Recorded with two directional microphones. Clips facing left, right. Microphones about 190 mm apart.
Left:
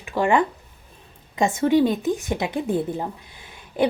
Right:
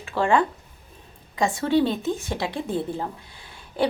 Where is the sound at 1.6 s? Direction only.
15° left (ahead or behind).